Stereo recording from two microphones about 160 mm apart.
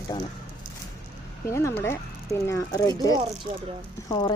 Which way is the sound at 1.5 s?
15° left (ahead or behind).